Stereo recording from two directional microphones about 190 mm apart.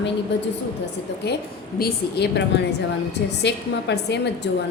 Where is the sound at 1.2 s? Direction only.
60° left (ahead or behind).